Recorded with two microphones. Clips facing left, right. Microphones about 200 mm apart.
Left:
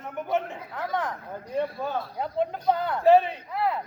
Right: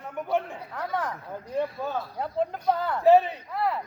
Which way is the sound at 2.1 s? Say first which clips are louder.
Even; 5° right (ahead or behind).